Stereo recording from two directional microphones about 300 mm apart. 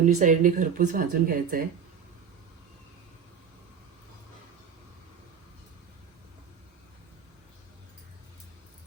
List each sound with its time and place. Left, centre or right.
0.0 s speech: right